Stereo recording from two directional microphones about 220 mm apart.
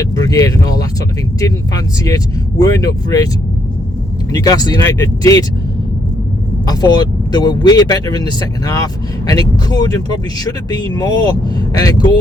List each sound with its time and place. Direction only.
0.0 s speech: 15° left (ahead or behind)
4.3 s speech: 15° left (ahead or behind)
6.7 s speech: 20° left (ahead or behind)